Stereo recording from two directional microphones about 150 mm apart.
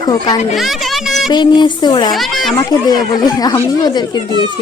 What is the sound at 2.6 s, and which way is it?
A woman's voice, 25° left (ahead or behind).